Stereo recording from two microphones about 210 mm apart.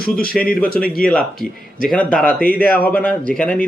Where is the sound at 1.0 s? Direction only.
5° left (ahead or behind).